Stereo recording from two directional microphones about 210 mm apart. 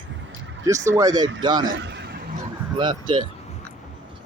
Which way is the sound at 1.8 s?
55° right (ahead or behind).